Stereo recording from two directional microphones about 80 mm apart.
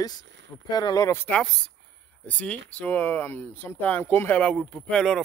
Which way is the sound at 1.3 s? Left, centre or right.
Centre.